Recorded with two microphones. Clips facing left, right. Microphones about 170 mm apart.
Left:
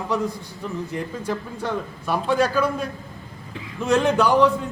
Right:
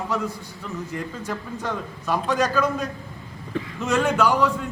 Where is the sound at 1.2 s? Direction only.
10° left (ahead or behind).